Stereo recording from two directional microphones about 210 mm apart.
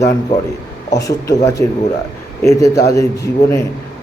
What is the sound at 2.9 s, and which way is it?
Speech, 15° left (ahead or behind).